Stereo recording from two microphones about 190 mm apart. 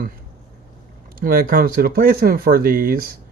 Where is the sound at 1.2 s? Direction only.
50° right (ahead or behind).